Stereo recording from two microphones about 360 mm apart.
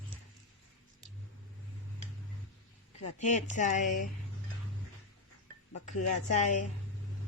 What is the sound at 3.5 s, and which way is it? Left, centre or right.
Speech, left.